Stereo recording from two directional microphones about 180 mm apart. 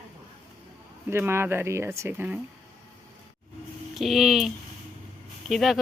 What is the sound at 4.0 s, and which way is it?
Speech, centre (ahead or behind).